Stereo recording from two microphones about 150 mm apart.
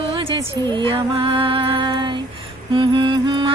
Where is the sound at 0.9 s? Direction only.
35° right (ahead or behind).